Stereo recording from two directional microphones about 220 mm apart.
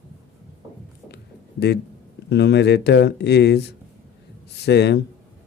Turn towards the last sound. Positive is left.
turn(degrees=50)  # may be behind; listen again after turning